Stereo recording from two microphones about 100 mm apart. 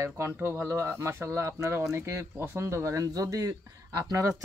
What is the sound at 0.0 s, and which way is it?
Speech, 25° right (ahead or behind).